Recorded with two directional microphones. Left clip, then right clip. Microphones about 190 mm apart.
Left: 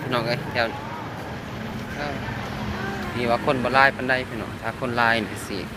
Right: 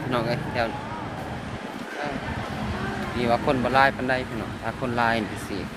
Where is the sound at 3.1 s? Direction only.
10° right (ahead or behind).